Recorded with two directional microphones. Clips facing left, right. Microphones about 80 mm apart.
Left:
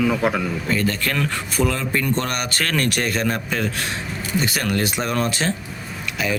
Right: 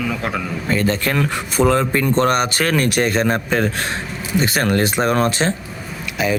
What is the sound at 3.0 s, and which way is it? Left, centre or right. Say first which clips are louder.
Speech: right 5 dB; right.